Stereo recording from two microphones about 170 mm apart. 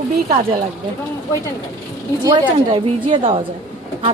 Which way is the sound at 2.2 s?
25° right (ahead or behind).